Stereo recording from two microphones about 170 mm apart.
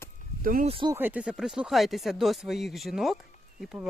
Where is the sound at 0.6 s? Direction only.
30° right (ahead or behind).